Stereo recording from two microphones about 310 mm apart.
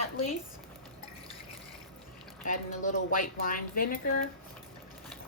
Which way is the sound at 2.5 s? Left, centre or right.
Left.